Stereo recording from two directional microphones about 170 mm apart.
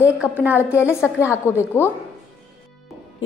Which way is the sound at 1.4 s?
15° left (ahead or behind).